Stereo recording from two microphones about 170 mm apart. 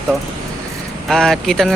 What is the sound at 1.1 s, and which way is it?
Speech, 5° left (ahead or behind).